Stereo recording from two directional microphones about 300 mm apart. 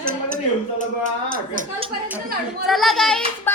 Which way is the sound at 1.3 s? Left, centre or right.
Right.